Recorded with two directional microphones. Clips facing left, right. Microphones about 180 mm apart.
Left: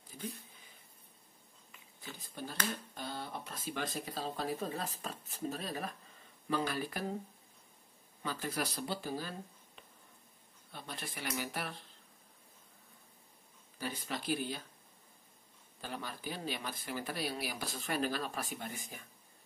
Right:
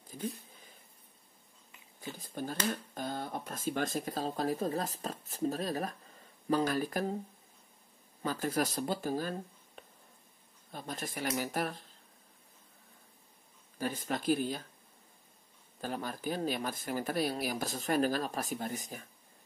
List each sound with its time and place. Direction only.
2.1 s a sound: 45° right (ahead or behind)
2.9 s speech: 45° right (ahead or behind)
8.2 s speech: 45° right (ahead or behind)
10.7 s speech: 45° right (ahead or behind)
13.7 s speech: 45° right (ahead or behind)
15.8 s speech: 45° right (ahead or behind)